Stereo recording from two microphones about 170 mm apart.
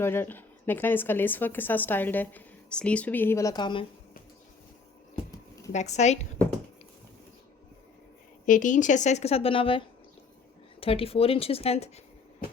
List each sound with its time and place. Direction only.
0.0 s speech: 15° left (ahead or behind)
5.7 s speech: 40° left (ahead or behind)
8.4 s a woman's voice: 50° left (ahead or behind)